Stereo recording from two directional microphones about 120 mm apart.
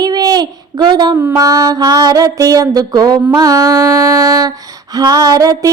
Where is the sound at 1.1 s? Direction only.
20° right (ahead or behind).